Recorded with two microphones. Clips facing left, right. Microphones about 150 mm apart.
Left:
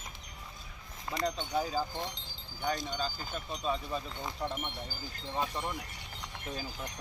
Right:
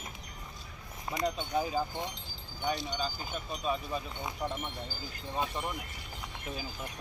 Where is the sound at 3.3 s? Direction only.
5° right (ahead or behind).